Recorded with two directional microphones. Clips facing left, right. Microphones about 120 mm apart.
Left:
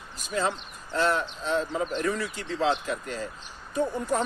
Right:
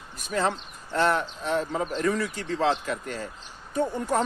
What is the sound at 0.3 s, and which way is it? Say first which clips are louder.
Speech: right 2 dB; 55° right (ahead or behind).